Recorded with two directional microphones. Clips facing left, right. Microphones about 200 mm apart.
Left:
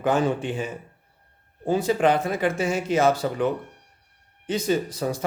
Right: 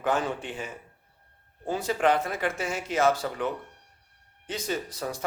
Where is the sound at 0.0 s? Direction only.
20° left (ahead or behind).